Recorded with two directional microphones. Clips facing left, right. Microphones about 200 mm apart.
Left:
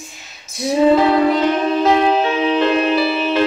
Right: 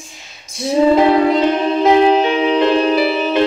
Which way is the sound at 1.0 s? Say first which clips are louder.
Right 2 dB; 20° right (ahead or behind).